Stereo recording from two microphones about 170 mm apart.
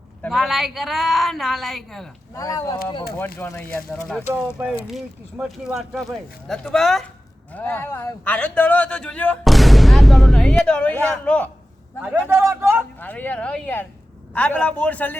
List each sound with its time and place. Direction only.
0.2 s speech: centre (ahead or behind)
2.3 s a man's voice: 20° left (ahead or behind)
4.4 s speech: 5° right (ahead or behind)
7.5 s a man's voice: 10° left (ahead or behind)
12.3 s speech: 15° right (ahead or behind)
13.0 s a man's voice: 10° left (ahead or behind)